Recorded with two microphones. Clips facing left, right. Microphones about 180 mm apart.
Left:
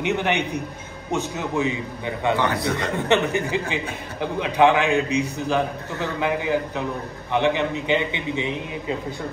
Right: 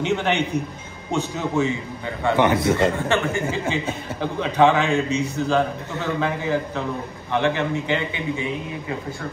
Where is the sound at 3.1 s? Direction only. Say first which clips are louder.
Left 2 dB; 20° left (ahead or behind).